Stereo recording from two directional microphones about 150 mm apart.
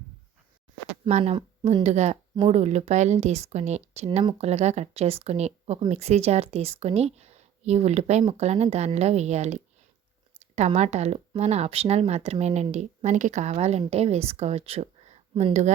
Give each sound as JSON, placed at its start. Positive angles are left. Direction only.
{"t": 1.0, "sound": "speech", "side_deg": -40}